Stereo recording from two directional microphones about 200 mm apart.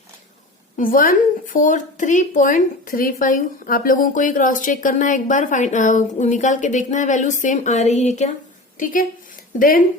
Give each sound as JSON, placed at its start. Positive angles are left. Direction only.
{"t": 0.8, "sound": "a woman's voice", "side_deg": 45}